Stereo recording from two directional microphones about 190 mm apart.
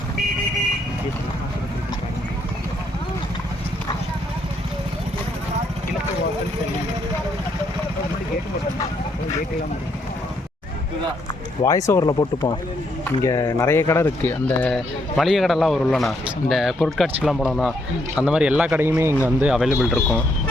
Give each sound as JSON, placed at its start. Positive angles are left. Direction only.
{"t": 11.6, "sound": "speech", "side_deg": 15}